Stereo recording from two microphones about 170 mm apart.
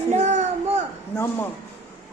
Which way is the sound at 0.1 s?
45° right (ahead or behind).